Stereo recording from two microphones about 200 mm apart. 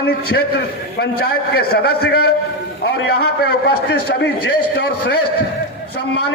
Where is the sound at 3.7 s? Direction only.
50° left (ahead or behind).